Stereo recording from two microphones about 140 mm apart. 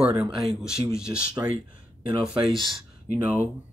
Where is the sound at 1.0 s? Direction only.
5° right (ahead or behind).